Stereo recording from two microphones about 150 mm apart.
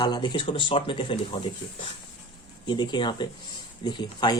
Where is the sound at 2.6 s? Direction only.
30° left (ahead or behind).